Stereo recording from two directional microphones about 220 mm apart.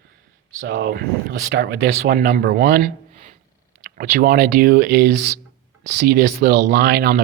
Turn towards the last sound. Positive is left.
turn(degrees=-45)  # may be behind; listen again after turning